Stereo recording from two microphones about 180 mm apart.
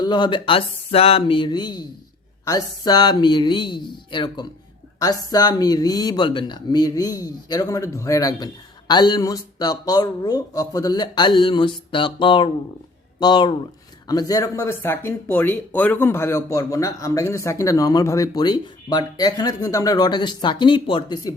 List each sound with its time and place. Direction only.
0.0 s speech: 25° left (ahead or behind)